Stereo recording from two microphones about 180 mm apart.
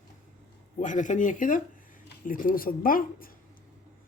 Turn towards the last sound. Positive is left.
turn(degrees=50)  # may be behind; listen again after turning